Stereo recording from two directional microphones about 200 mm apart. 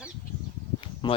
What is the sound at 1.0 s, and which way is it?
Speech, 20° left (ahead or behind).